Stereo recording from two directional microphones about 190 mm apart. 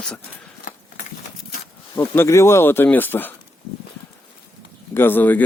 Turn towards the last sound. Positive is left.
turn(degrees=10)  # may be behind; listen again after turning